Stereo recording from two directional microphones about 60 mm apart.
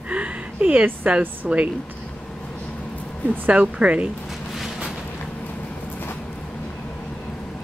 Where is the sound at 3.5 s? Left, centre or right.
Right.